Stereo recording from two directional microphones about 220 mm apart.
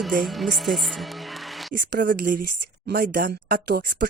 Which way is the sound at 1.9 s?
45° right (ahead or behind).